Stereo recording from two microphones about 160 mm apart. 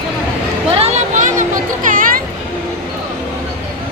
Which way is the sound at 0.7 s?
40° right (ahead or behind).